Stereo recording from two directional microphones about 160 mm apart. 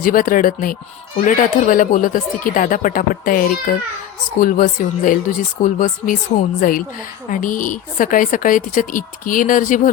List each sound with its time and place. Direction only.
0.0 s a woman's voice: 60° left (ahead or behind)